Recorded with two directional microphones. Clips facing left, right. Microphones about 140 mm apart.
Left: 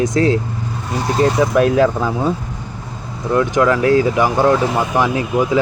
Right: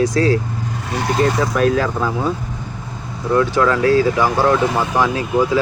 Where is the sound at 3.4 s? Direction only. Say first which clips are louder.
Left 1 dB; 15° left (ahead or behind).